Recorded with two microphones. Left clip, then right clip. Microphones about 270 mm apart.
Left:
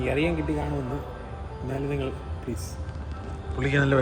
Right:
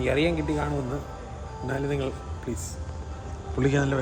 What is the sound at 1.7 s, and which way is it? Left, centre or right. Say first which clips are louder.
Speech: right 1 dB; centre.